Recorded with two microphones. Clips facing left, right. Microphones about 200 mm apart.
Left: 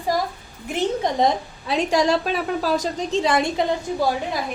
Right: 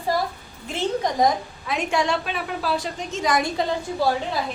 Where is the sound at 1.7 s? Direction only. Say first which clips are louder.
Left 4 dB; 35° left (ahead or behind).